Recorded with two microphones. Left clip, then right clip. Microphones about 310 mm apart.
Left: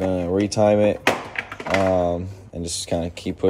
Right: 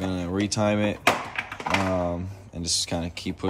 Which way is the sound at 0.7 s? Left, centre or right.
Right.